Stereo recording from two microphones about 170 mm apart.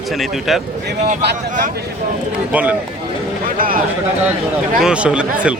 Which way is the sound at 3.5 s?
55° right (ahead or behind).